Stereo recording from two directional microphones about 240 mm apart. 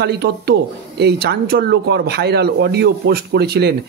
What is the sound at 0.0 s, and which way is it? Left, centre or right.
Speech, right.